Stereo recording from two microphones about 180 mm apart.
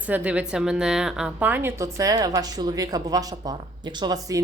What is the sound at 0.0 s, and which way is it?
A woman's voice, 5° right (ahead or behind).